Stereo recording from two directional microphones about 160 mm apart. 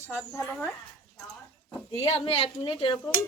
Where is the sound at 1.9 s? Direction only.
35° left (ahead or behind).